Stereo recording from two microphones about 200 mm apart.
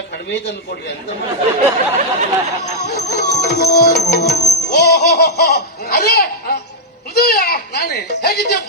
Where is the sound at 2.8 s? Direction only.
55° left (ahead or behind).